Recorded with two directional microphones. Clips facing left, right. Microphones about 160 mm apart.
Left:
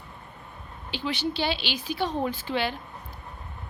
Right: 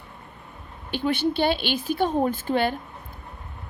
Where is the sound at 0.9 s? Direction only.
55° right (ahead or behind).